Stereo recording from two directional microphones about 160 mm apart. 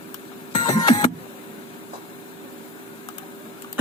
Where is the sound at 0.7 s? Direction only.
25° left (ahead or behind).